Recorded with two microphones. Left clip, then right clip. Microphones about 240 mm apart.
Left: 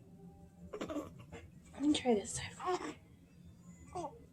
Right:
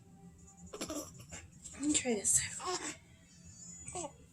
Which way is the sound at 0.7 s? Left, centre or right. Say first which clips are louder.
Even; centre.